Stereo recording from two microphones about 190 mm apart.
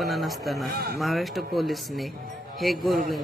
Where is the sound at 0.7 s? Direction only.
55° right (ahead or behind).